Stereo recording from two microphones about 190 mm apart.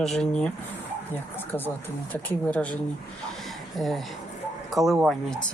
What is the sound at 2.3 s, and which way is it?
Speech, 5° left (ahead or behind).